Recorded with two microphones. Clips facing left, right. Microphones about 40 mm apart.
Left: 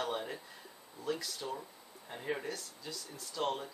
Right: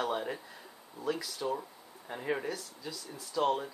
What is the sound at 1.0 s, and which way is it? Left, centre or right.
Speech, centre.